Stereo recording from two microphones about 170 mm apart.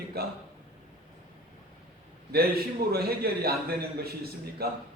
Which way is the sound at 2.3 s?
65° right (ahead or behind).